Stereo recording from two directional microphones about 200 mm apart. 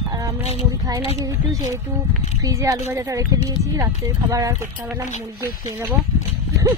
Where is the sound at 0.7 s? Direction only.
20° right (ahead or behind).